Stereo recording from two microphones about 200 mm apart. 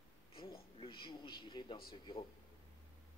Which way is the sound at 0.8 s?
25° left (ahead or behind).